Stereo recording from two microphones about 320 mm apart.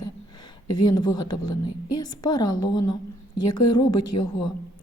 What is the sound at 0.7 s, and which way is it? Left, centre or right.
A woman's voice, centre.